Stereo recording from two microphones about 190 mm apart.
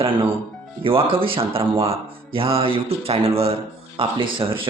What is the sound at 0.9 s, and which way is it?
Speech, 30° right (ahead or behind).